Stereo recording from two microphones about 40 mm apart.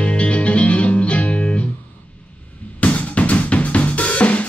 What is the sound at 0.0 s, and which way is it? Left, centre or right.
Music, left.